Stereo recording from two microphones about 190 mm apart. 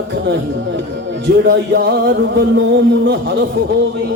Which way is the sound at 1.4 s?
65° right (ahead or behind).